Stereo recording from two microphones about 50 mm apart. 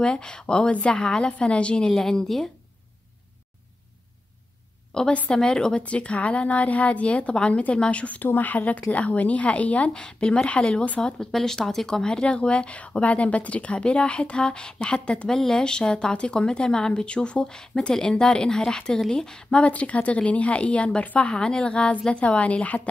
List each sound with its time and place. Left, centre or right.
0.0 s a woman's voice: centre
4.9 s a woman's voice: centre
21.3 s speech: centre